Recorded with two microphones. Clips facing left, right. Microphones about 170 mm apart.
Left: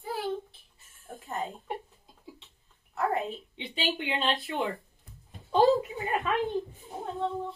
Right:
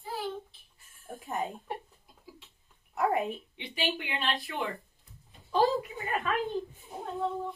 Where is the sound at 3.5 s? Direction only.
25° left (ahead or behind).